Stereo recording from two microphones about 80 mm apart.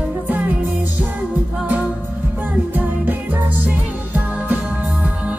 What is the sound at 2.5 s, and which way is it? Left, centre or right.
Music, right.